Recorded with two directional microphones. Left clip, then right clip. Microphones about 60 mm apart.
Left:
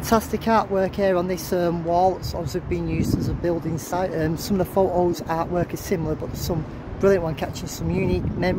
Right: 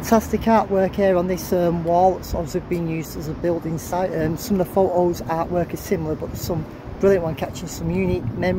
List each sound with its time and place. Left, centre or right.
0.1 s speech: centre
1.9 s speech: centre
2.7 s speech: centre
5.3 s speech: centre